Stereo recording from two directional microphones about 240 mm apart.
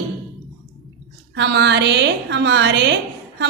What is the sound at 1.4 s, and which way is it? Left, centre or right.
A woman's voice, right.